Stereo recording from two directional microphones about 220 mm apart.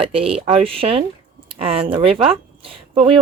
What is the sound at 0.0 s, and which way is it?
Speech, 25° right (ahead or behind).